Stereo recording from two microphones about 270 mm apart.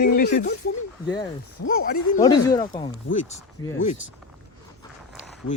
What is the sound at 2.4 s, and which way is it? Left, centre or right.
Speech, centre.